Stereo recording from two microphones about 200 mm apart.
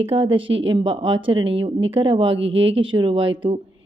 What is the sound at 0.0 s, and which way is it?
Speech, 25° right (ahead or behind).